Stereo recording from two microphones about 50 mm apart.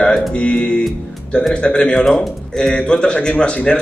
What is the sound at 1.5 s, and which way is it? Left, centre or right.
Speech, centre.